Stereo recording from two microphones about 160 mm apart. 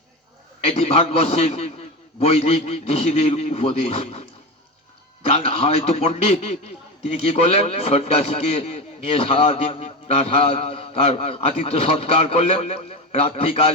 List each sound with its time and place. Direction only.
0.6 s a man's voice: 40° left (ahead or behind)